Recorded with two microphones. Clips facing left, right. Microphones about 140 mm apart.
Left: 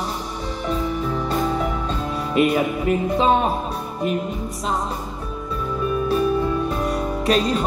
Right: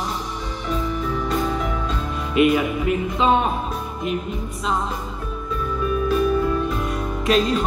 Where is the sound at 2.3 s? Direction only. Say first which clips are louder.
Right 1 dB; 35° left (ahead or behind).